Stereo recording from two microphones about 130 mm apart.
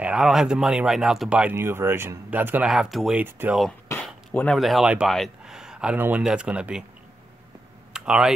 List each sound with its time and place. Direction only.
0.0 s speech: 5° right (ahead or behind)
2.7 s speech: centre (ahead or behind)
3.2 s speech: 15° right (ahead or behind)
3.9 s a sound: 15° left (ahead or behind)
4.6 s speech: centre (ahead or behind)
7.9 s a sound: 5° right (ahead or behind)